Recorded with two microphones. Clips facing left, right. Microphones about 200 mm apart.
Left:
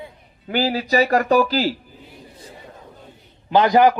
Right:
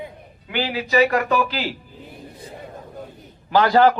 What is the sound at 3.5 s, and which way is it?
Speech, 20° left (ahead or behind).